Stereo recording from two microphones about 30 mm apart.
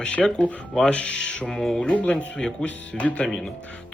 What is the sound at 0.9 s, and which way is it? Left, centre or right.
Speech, left.